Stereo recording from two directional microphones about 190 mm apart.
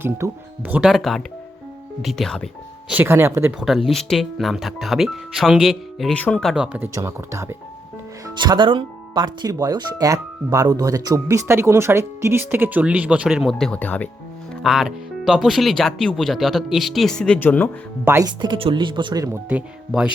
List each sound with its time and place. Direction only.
0.0 s speech: 10° right (ahead or behind)
2.9 s speech: 10° right (ahead or behind)
3.7 s speech: centre (ahead or behind)
6.7 s speech: 10° right (ahead or behind); by 17.7 s 10° left (ahead or behind)
18.0 s speech: 15° right (ahead or behind)